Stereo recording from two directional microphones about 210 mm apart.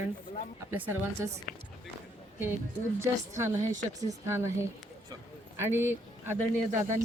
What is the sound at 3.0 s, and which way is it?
Speech, 15° right (ahead or behind).